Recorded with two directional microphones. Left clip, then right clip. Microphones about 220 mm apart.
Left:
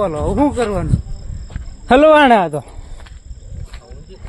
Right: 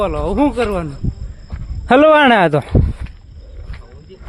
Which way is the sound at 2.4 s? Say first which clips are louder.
Right 5 dB; 25° right (ahead or behind).